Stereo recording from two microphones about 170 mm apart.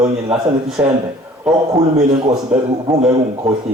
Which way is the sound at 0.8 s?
10° right (ahead or behind).